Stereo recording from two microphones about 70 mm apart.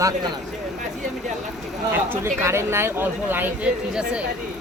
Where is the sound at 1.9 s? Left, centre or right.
Right.